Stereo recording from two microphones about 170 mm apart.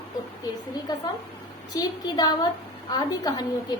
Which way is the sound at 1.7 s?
20° left (ahead or behind).